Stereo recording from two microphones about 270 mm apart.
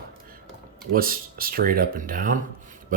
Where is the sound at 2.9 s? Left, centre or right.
Right.